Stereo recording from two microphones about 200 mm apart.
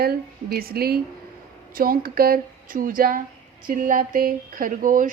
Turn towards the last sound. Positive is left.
turn(degrees=-45)  # may be behind; listen again after turning